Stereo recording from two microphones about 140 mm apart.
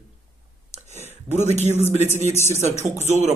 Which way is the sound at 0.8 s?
55° right (ahead or behind).